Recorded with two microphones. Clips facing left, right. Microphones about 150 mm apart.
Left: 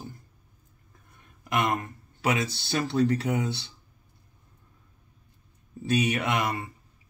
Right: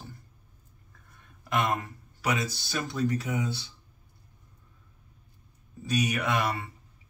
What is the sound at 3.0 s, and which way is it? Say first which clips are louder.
Speech: left 4 dB; 70° left (ahead or behind).